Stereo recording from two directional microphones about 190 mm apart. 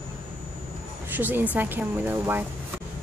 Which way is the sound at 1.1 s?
10° right (ahead or behind).